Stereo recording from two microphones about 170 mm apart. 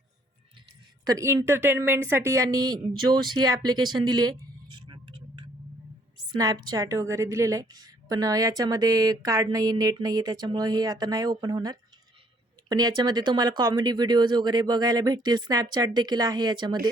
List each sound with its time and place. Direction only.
1.0 s a woman's voice: 20° right (ahead or behind)